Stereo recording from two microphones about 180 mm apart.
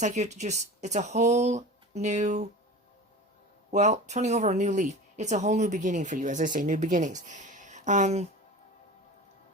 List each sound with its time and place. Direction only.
0.0 s speech: 40° right (ahead or behind)
3.7 s speech: 40° right (ahead or behind)